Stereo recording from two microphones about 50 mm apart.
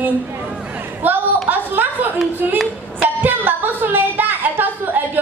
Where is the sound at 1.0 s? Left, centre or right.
Right.